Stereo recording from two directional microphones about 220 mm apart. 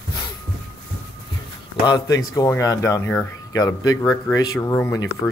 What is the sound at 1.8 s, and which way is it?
Speech, 15° left (ahead or behind).